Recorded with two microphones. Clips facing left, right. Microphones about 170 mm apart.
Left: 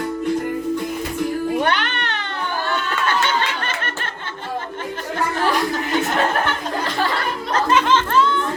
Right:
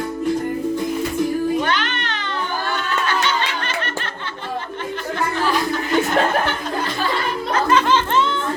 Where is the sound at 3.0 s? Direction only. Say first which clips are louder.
Left 2 dB; 50° left (ahead or behind).